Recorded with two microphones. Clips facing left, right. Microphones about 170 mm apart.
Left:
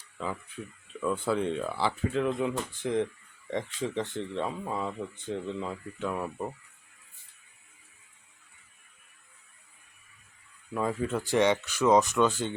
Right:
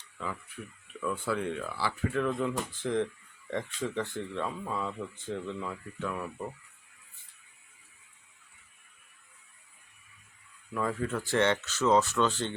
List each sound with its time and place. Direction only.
0.2 s speech: 25° left (ahead or behind)
10.8 s speech: 20° left (ahead or behind)